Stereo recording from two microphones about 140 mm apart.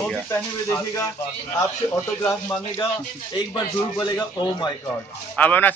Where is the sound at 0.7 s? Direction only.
30° left (ahead or behind).